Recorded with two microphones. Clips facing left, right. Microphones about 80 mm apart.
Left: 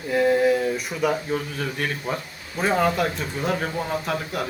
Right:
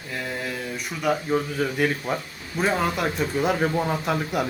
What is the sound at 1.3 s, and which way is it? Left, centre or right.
Speech, centre.